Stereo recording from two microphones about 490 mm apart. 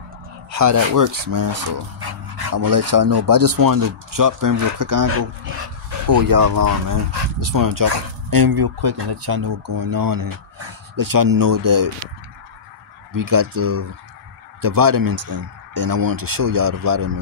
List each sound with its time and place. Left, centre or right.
0.5 s speech: right
9.3 s speech: right
13.1 s speech: right